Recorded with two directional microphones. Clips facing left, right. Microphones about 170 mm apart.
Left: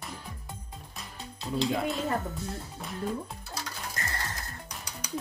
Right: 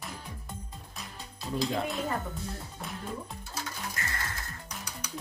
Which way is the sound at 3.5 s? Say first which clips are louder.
Right 1 dB; 35° left (ahead or behind).